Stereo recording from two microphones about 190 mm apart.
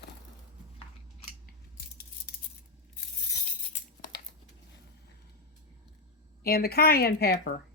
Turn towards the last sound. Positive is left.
turn(degrees=55)  # may be behind; listen again after turning